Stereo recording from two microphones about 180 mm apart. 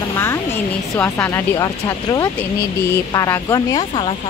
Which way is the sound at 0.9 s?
10° left (ahead or behind).